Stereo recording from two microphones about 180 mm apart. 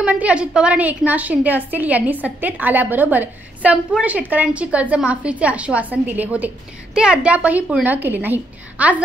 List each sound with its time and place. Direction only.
0.0 s a woman's voice: 5° right (ahead or behind)